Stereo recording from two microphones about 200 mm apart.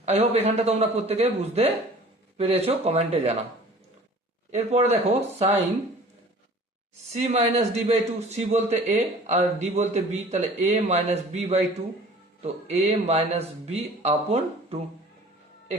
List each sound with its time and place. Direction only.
0.0 s a man's voice: 30° right (ahead or behind)
4.5 s a man's voice: 35° right (ahead or behind)
7.1 s a man's voice: 30° right (ahead or behind)